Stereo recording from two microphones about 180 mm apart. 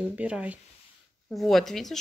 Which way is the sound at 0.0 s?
5° right (ahead or behind).